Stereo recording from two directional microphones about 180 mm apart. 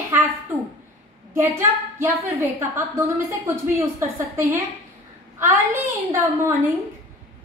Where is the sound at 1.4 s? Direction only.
15° right (ahead or behind).